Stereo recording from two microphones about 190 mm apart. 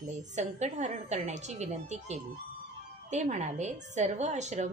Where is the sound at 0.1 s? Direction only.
35° right (ahead or behind).